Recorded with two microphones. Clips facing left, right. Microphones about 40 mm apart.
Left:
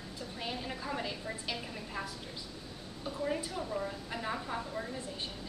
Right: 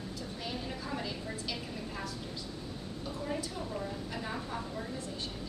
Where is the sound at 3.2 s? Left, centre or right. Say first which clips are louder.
Left 3 dB; centre.